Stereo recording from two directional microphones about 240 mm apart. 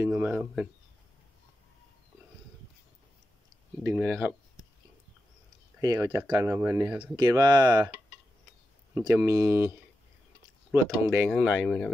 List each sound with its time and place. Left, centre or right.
0.0 s speech: centre
3.8 s speech: centre
5.8 s speech: centre
7.2 s speech: centre
8.9 s speech: centre